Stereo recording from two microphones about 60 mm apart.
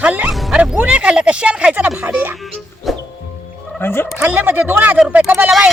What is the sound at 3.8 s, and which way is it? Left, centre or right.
Speech, left.